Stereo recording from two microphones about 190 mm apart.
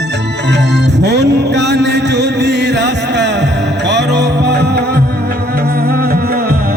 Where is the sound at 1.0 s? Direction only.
65° right (ahead or behind).